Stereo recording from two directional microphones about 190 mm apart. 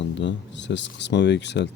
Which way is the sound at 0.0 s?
70° left (ahead or behind).